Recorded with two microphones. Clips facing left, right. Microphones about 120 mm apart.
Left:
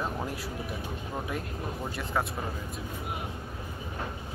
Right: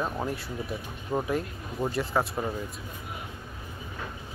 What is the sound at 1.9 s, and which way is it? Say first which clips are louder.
Speech: right 5 dB; centre (ahead or behind).